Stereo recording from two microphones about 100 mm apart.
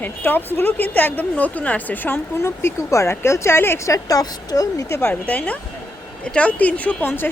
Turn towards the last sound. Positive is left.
turn(degrees=20)  # may be behind; listen again after turning